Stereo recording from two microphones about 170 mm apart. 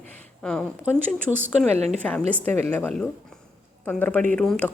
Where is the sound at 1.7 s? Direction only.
40° right (ahead or behind).